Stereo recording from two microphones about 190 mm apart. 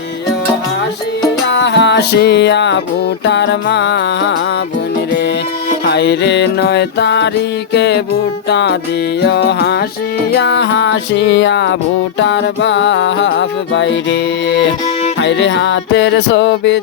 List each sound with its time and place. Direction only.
1.5 s music: 65° left (ahead or behind)
5.8 s music: 60° left (ahead or behind)